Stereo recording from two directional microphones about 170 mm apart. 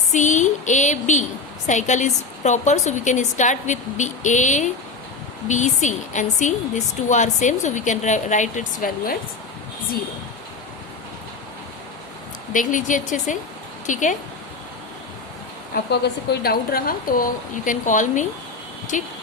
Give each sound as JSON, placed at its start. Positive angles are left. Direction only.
{"t": 0.1, "sound": "a woman's voice", "side_deg": 45}
{"t": 12.5, "sound": "a woman's voice", "side_deg": 50}
{"t": 15.7, "sound": "a woman's voice", "side_deg": 70}